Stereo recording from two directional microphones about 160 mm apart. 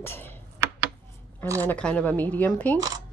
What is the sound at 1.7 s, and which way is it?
A woman's voice, 5° left (ahead or behind).